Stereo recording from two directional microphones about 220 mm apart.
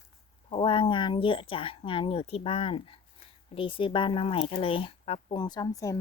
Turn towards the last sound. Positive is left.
turn(degrees=15)  # may be behind; listen again after turning